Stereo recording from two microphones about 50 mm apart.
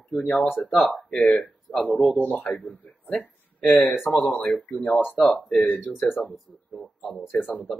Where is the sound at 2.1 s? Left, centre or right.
Left.